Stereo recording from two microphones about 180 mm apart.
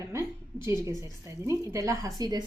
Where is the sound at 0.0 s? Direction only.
15° right (ahead or behind).